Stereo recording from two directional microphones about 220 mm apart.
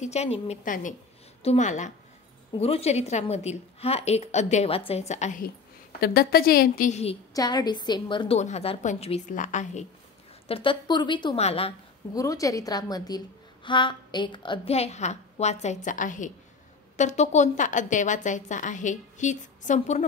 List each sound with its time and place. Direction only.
0.0 s a woman's voice: 30° left (ahead or behind)
7.3 s a woman's voice: 20° left (ahead or behind)
12.2 s a woman's voice: 15° left (ahead or behind); by 20.1 s 35° left (ahead or behind)